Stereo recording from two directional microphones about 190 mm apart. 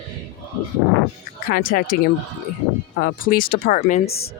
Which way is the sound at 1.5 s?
50° left (ahead or behind).